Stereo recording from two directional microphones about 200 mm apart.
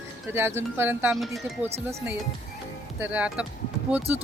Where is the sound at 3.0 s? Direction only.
5° right (ahead or behind).